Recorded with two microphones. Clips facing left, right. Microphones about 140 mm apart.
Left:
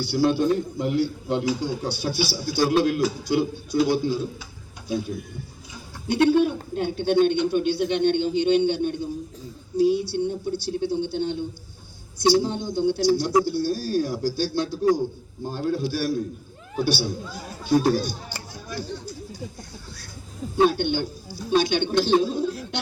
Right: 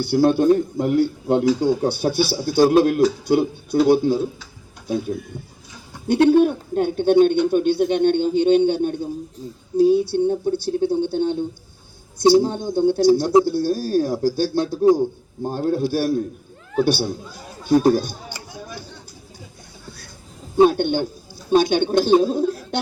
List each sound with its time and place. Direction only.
0.0 s a man's voice: 55° right (ahead or behind)
6.1 s speech: 45° right (ahead or behind)
20.7 s a man's voice: 50° right (ahead or behind)